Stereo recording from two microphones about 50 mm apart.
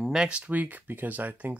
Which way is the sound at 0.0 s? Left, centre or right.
Centre.